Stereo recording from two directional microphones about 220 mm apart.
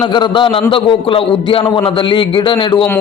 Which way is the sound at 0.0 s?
20° left (ahead or behind).